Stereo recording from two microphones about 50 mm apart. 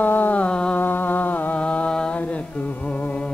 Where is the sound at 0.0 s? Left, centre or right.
Left.